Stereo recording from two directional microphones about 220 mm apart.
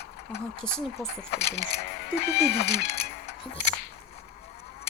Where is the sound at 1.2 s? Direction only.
45° left (ahead or behind).